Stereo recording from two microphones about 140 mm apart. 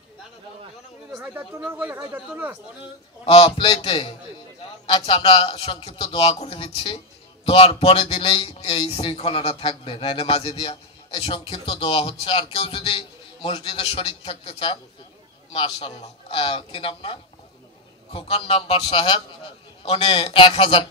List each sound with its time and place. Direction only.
1.1 s speech: 5° right (ahead or behind)
3.3 s a man's voice: 45° left (ahead or behind)